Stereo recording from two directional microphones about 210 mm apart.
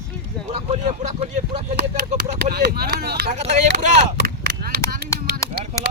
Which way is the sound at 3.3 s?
35° right (ahead or behind).